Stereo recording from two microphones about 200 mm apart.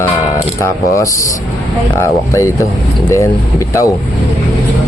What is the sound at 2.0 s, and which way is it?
Speech, 15° left (ahead or behind).